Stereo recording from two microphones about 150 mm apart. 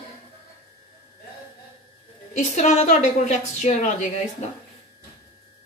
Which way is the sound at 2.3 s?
50° left (ahead or behind).